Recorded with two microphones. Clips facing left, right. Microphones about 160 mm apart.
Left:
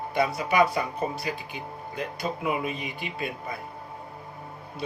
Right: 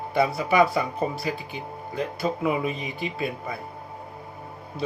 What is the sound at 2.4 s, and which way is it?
Speech, 35° right (ahead or behind).